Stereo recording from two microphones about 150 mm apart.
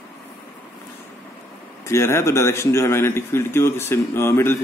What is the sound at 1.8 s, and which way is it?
A man's voice, 20° left (ahead or behind).